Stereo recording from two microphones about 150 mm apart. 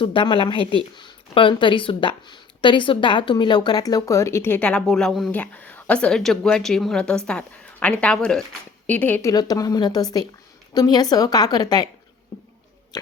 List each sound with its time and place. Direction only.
0.0 s a woman's voice: 35° left (ahead or behind); by 9.2 s 10° left (ahead or behind)
9.2 s a woman's voice: 25° left (ahead or behind)
12.9 s a woman's voice: 25° left (ahead or behind)